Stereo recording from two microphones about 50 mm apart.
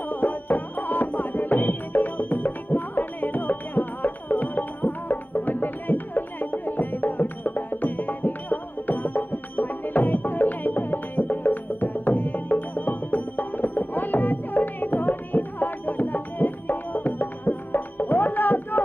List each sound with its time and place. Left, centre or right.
0.1 s music: left